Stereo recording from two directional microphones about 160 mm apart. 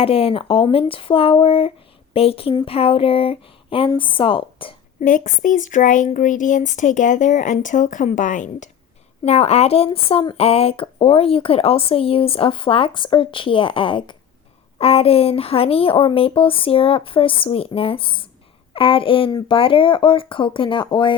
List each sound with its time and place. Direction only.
0.0 s speech: 35° left (ahead or behind)
4.9 s speech: 55° left (ahead or behind); by 21.1 s 30° left (ahead or behind)